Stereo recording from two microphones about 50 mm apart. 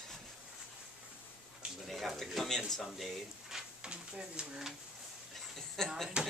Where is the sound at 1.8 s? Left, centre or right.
Centre.